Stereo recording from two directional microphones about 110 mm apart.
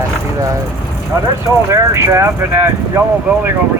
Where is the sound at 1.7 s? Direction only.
25° right (ahead or behind).